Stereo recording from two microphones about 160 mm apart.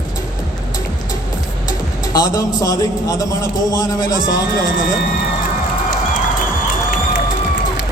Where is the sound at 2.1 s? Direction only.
20° left (ahead or behind).